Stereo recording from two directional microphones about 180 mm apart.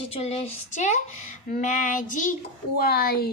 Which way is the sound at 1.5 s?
45° left (ahead or behind).